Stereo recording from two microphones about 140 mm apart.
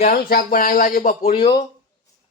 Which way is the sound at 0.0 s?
90° left.